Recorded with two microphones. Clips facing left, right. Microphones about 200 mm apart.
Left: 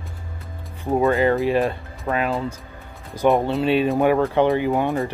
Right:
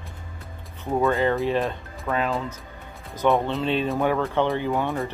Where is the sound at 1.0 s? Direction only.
5° left (ahead or behind).